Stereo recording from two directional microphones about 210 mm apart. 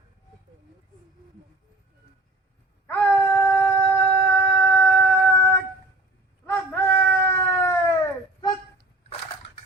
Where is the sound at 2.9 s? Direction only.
10° left (ahead or behind).